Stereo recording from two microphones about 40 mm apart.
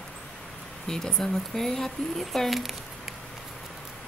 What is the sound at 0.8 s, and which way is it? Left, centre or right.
Speech, centre.